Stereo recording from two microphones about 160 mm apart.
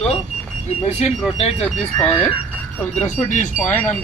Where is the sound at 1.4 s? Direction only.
40° left (ahead or behind).